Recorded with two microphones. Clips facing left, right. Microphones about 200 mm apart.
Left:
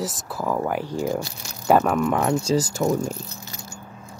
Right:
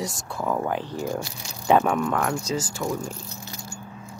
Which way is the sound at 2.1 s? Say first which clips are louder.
Left 4 dB; 25° left (ahead or behind).